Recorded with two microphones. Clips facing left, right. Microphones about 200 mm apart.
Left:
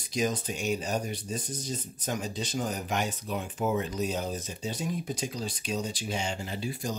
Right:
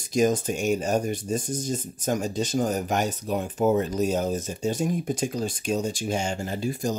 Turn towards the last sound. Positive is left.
turn(degrees=-45)  # may be behind; listen again after turning